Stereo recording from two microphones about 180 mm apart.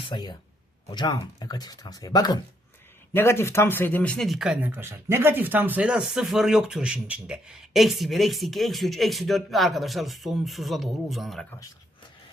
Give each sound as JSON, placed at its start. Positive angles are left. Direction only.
{"t": 0.0, "sound": "speech", "side_deg": 25}